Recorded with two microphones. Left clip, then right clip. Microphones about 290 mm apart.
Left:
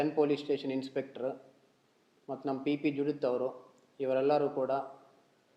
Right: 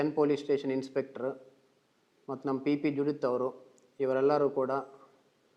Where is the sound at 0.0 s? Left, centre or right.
Right.